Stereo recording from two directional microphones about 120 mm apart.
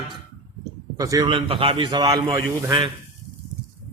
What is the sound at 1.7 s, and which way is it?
Speech, 35° right (ahead or behind).